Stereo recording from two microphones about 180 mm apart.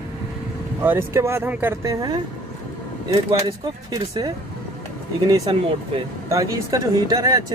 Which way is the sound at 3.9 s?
20° right (ahead or behind).